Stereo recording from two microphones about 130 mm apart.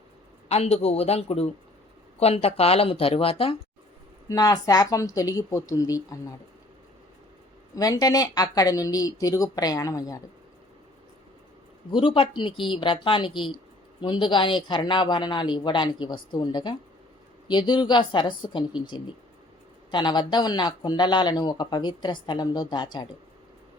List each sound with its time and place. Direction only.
0.4 s speech: 55° left (ahead or behind)
4.3 s speech: 30° left (ahead or behind)
7.8 s speech: 30° left (ahead or behind)
11.9 s speech: 40° left (ahead or behind)